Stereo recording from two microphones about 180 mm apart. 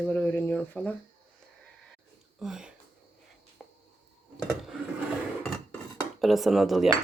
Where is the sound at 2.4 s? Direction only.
5° right (ahead or behind).